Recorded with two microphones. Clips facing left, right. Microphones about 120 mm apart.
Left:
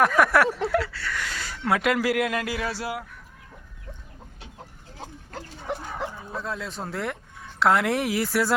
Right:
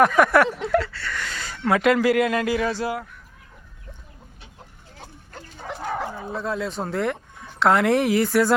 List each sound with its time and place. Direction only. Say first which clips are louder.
0.0 s speech: right 3 dB; centre (ahead or behind)
5.8 s bow-wow: right 5 dB; 90° right
6.3 s speech: right 5 dB; centre (ahead or behind)